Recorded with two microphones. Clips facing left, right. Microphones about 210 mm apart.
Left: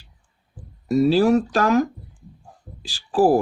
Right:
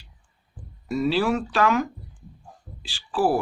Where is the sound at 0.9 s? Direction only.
40° left (ahead or behind).